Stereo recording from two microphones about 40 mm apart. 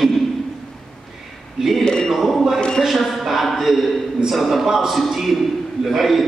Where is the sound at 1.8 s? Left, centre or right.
Centre.